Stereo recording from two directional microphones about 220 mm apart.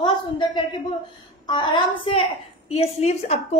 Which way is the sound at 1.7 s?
25° left (ahead or behind).